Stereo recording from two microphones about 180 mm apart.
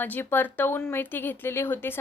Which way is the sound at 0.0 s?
10° left (ahead or behind).